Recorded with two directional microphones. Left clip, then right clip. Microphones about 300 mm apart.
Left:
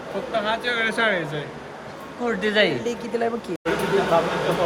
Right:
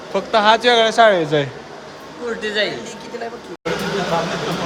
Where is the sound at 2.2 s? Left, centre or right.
Left.